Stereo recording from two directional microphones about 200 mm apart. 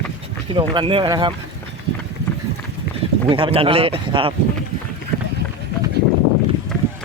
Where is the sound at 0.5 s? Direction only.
25° right (ahead or behind).